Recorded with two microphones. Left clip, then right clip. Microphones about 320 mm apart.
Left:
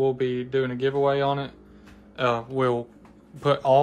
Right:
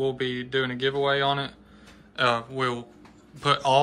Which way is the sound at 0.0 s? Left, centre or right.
Centre.